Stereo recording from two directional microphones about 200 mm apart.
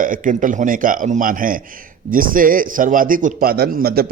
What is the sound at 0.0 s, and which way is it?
A man's voice, 40° right (ahead or behind).